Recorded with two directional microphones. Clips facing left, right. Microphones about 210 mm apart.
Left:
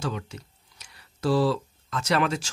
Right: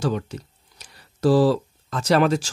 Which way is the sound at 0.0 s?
35° right (ahead or behind).